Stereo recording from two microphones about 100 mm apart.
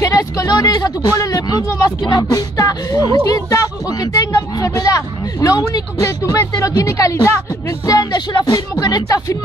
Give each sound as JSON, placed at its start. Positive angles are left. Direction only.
{"t": 0.0, "sound": "speech", "side_deg": 35}